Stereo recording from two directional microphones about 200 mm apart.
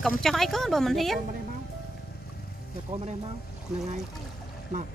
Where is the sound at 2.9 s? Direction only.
30° right (ahead or behind).